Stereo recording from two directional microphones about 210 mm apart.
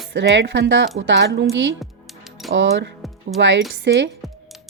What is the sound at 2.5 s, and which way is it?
Speech, 60° right (ahead or behind).